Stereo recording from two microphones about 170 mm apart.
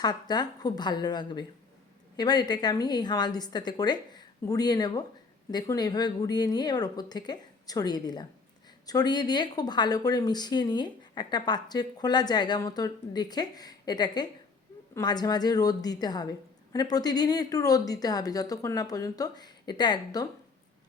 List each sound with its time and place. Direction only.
0.0 s speech: 25° left (ahead or behind)